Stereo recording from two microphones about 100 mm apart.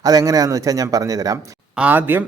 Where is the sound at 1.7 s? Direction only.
15° right (ahead or behind).